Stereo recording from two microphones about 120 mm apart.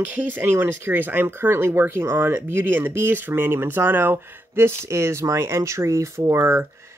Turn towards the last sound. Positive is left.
turn(degrees=-20)  # may be behind; listen again after turning